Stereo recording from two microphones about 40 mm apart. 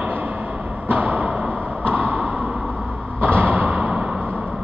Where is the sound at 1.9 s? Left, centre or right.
Right.